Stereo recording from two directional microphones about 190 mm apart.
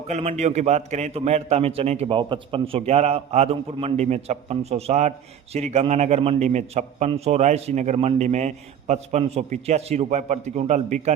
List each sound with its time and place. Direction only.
0.1 s a man's voice: 35° right (ahead or behind)